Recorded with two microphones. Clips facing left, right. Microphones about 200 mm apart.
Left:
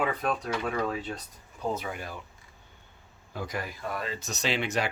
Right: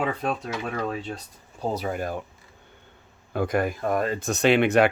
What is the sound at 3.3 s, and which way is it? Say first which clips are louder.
Speech: right 11 dB; 55° right (ahead or behind).